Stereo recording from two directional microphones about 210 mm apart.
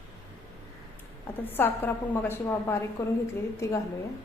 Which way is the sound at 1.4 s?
10° left (ahead or behind).